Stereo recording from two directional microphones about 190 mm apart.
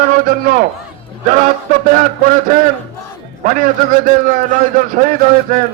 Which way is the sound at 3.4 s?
45° right (ahead or behind).